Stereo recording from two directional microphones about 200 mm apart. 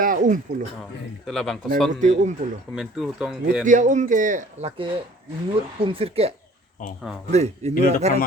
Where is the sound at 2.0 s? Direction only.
35° right (ahead or behind).